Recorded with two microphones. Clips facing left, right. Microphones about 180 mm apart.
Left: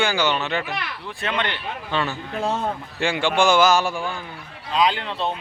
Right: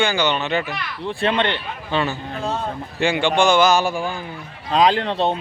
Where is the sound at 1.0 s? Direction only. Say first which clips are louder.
Right 7 dB; 25° right (ahead or behind).